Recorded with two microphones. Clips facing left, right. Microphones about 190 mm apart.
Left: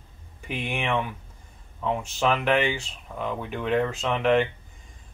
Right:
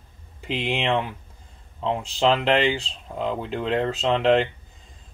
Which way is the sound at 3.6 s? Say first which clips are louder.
Even; 25° right (ahead or behind).